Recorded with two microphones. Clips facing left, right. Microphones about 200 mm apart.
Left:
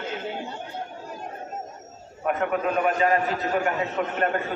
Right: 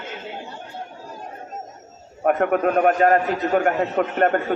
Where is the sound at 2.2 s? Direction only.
55° right (ahead or behind).